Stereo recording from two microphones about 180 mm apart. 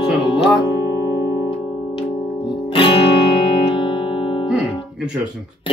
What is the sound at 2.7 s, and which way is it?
Music, 30° left (ahead or behind).